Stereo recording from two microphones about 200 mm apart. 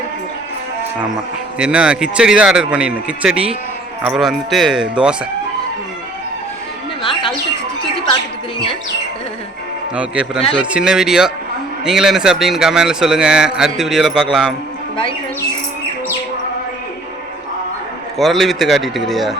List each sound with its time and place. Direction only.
0.9 s speech: 5° right (ahead or behind)
7.0 s bird: 25° left (ahead or behind)
9.9 s speech: 5° right (ahead or behind)
18.2 s speech: centre (ahead or behind)